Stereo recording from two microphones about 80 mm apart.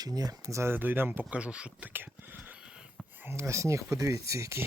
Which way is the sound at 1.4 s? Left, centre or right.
Centre.